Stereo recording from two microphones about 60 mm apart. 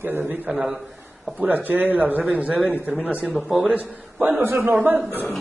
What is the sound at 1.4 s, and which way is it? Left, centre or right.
A man's voice, right.